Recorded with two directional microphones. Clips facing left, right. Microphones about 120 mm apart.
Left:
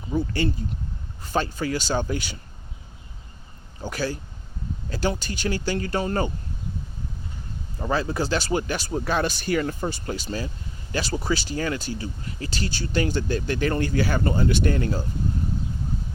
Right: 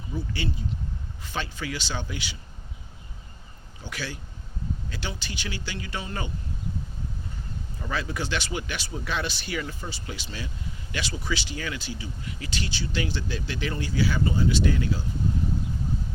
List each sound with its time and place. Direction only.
0.1 s speech: 50° left (ahead or behind)
3.8 s speech: 40° left (ahead or behind)
7.8 s speech: 35° left (ahead or behind)